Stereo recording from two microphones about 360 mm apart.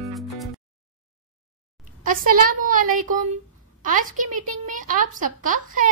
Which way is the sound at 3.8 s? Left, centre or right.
Right.